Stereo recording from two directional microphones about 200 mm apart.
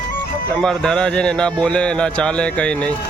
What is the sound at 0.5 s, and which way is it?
A man's voice, 5° left (ahead or behind).